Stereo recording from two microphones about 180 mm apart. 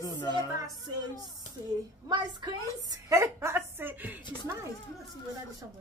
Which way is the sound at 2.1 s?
20° right (ahead or behind).